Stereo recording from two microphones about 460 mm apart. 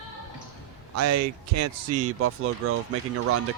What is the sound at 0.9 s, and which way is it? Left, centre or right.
Speech, right.